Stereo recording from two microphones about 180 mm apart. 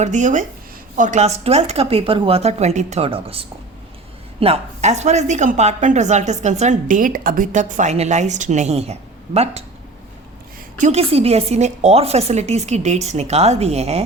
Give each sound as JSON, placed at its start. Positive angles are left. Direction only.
{"t": 0.0, "sound": "a woman's voice", "side_deg": -40}
{"t": 10.8, "sound": "a woman's voice", "side_deg": -40}